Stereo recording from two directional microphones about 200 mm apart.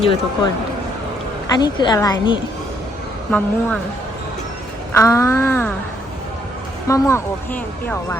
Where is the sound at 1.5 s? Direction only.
20° left (ahead or behind).